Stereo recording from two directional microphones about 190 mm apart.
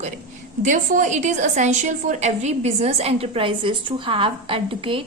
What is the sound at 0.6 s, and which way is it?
A woman's voice, 40° right (ahead or behind).